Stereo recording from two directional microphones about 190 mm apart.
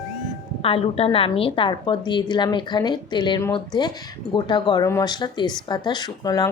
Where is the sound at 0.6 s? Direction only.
30° left (ahead or behind).